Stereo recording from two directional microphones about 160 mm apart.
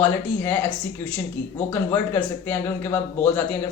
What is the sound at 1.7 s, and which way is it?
Speech, 15° left (ahead or behind).